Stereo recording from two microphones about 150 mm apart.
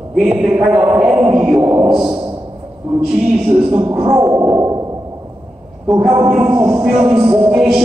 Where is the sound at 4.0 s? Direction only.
20° right (ahead or behind).